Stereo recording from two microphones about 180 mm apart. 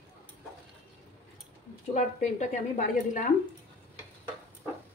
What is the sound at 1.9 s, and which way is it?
A woman's voice, 45° left (ahead or behind).